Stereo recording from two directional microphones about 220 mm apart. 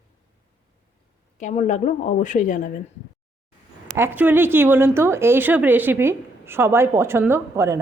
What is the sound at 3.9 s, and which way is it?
Speech, 10° right (ahead or behind).